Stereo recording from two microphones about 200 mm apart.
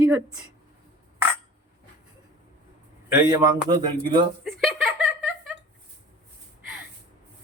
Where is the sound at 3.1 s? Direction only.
15° right (ahead or behind).